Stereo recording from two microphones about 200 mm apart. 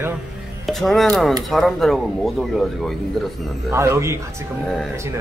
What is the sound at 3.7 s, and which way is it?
Speech, 15° right (ahead or behind).